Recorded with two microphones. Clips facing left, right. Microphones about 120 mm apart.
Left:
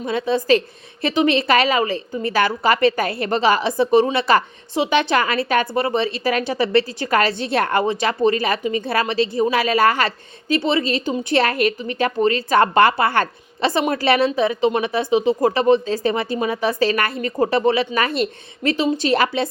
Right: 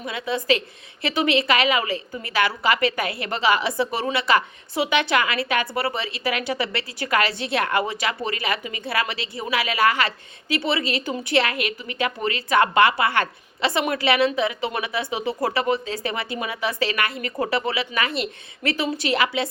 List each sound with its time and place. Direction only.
0.0 s a woman's voice: 30° left (ahead or behind)
5.7 s speech: 25° left (ahead or behind)
6.2 s a woman's voice: 35° left (ahead or behind)
11.0 s speech: 20° left (ahead or behind)
11.3 s a woman's voice: 40° left (ahead or behind)
15.1 s a woman's voice: 20° left (ahead or behind); by 19.5 s 35° left (ahead or behind)